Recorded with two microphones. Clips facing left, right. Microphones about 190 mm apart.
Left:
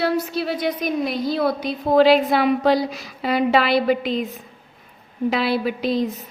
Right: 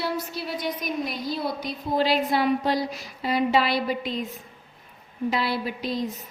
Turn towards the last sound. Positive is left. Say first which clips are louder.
# left 7 dB
turn(degrees=70)  # may be behind; listen again after turning